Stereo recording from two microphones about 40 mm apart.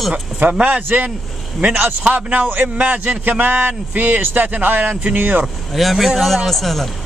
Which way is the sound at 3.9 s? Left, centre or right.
Right.